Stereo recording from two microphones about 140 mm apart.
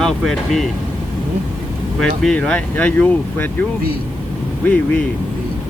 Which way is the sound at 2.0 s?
5° left (ahead or behind).